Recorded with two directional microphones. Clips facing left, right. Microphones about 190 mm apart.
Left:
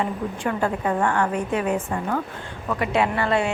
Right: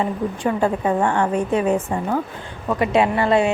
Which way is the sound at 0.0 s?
20° right (ahead or behind).